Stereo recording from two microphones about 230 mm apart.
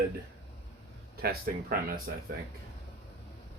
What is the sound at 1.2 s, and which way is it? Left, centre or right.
Speech, right.